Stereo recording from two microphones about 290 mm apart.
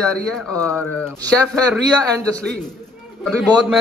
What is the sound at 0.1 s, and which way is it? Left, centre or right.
Speech, centre.